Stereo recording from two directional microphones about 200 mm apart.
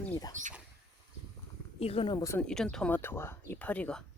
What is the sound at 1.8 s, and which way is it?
Speech, 30° left (ahead or behind).